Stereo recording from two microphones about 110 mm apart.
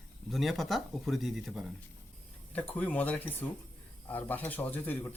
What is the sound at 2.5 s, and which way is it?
Speech, 15° left (ahead or behind).